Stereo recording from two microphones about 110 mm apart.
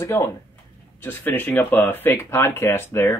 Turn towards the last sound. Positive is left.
turn(degrees=20)  # may be behind; listen again after turning